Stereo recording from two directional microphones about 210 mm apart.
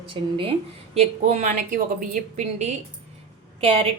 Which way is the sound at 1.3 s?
35° right (ahead or behind).